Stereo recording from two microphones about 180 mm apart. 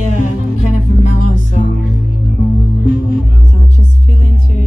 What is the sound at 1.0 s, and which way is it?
Music, 40° left (ahead or behind).